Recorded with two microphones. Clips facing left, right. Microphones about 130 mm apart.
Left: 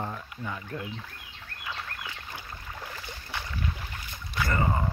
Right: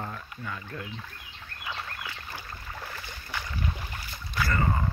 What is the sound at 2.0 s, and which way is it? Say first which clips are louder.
Boat: right 1 dB; 15° left (ahead or behind).